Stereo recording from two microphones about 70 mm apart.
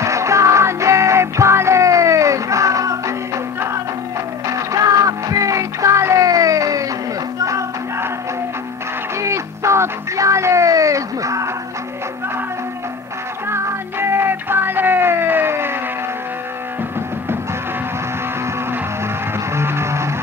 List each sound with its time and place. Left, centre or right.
0.0 s music: right
4.5 s music: right
6.2 s a sound: right
7.4 s music: right
9.2 s music: right
13.5 s music: right
19.5 s music: right